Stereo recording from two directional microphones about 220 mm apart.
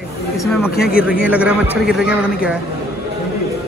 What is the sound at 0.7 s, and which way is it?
Speech, 45° left (ahead or behind).